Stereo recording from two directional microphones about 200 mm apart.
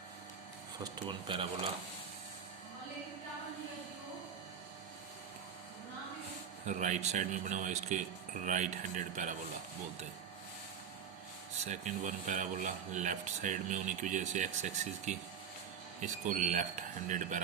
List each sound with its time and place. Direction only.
0.9 s speech: 25° right (ahead or behind)
6.7 s speech: 40° right (ahead or behind)
11.6 s speech: 35° right (ahead or behind)